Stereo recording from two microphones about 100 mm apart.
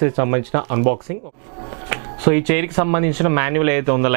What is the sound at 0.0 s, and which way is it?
Speech, 20° right (ahead or behind).